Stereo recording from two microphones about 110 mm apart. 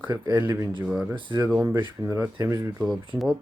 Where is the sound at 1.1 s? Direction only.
45° right (ahead or behind).